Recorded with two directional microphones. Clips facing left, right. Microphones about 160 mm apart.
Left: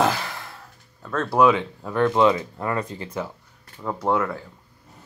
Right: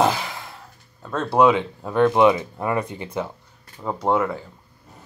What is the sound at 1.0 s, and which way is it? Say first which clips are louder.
Speech: right 1 dB; 15° right (ahead or behind).